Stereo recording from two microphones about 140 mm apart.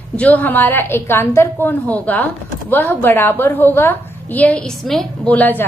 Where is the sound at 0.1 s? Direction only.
10° left (ahead or behind).